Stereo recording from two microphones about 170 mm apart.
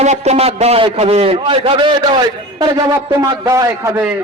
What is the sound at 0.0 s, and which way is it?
A man's voice, 40° right (ahead or behind).